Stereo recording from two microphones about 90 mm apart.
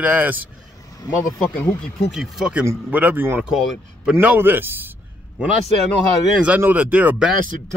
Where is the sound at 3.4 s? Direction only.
5° right (ahead or behind).